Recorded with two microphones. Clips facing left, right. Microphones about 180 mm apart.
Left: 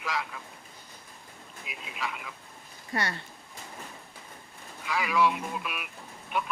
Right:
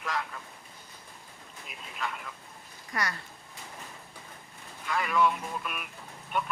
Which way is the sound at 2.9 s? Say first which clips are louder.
Left 2 dB; 30° left (ahead or behind).